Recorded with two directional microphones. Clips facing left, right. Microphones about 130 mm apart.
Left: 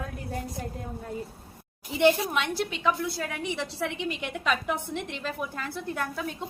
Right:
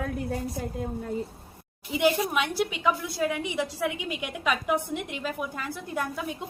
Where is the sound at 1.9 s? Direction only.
5° right (ahead or behind).